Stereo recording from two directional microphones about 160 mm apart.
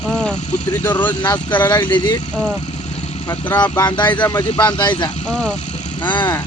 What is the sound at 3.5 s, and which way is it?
Speech, 25° left (ahead or behind).